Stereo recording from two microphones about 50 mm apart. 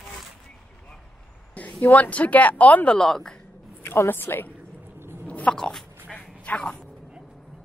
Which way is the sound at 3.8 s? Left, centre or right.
Left.